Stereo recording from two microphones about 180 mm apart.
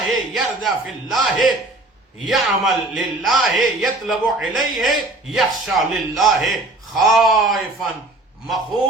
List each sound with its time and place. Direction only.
0.1 s a man's voice: centre (ahead or behind)